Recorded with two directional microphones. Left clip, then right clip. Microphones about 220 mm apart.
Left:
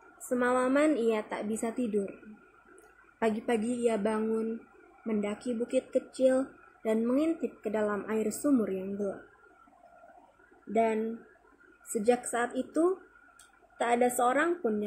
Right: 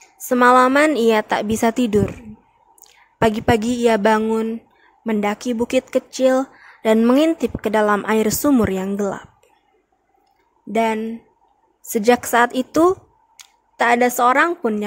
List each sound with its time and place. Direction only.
0.3 s speech: 55° right (ahead or behind)
3.2 s speech: 50° right (ahead or behind)
10.7 s speech: 50° right (ahead or behind)
12.0 s speech: 50° right (ahead or behind)